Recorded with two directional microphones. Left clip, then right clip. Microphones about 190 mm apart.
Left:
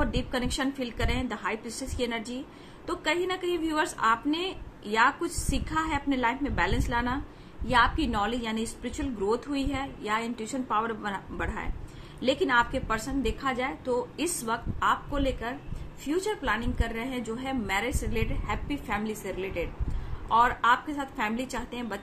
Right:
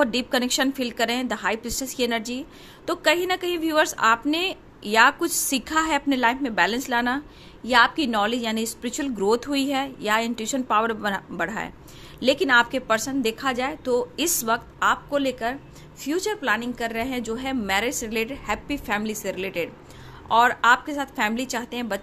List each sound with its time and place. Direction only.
0.0 s a woman's voice: 55° right (ahead or behind)